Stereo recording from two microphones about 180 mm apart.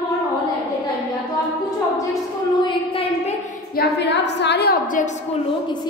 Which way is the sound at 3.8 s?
70° left (ahead or behind).